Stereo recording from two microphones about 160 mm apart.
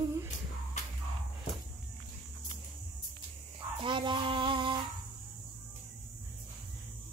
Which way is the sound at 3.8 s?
30° right (ahead or behind).